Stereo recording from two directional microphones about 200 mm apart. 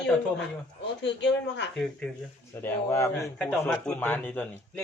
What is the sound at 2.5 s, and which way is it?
A man's voice, 15° left (ahead or behind).